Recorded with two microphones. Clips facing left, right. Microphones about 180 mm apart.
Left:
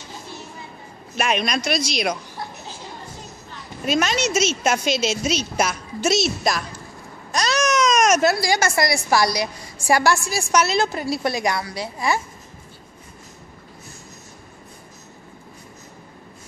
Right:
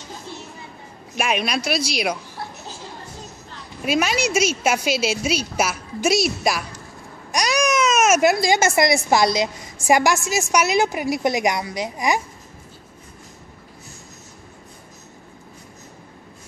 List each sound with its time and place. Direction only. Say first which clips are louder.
1.1 s a woman's voice: even; 10° right (ahead or behind)
3.8 s a woman's voice: even; 10° right (ahead or behind)